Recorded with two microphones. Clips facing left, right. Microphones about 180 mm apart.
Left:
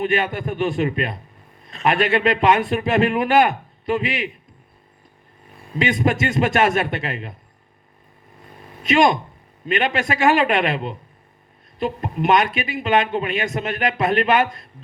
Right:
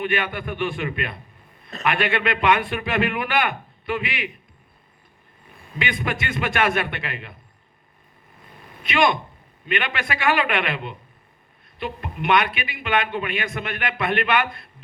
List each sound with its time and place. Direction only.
0.0 s a man's voice: 40° left (ahead or behind)
5.8 s a man's voice: 40° left (ahead or behind)
8.8 s a man's voice: 40° left (ahead or behind)